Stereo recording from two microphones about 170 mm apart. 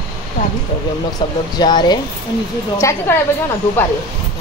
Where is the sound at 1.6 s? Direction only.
25° left (ahead or behind).